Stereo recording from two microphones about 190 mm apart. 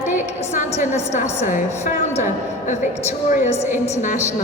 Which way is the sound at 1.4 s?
40° left (ahead or behind).